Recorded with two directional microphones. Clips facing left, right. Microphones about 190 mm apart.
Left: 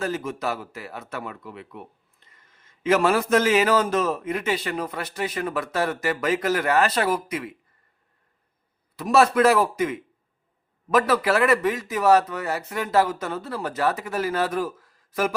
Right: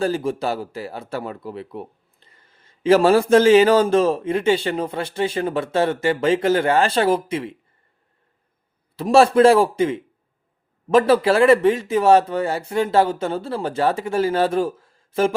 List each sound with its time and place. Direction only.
0.0 s speech: 30° right (ahead or behind)
9.0 s speech: 30° right (ahead or behind)